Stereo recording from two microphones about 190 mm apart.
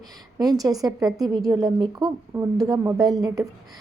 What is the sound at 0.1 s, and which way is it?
A woman's voice, 20° right (ahead or behind).